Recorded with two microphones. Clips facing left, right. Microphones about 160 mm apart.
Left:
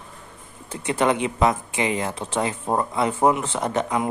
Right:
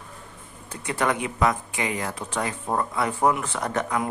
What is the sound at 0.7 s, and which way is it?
Speech, 25° left (ahead or behind).